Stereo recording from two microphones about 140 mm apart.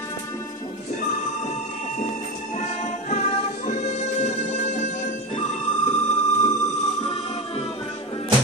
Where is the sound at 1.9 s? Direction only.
55° left (ahead or behind).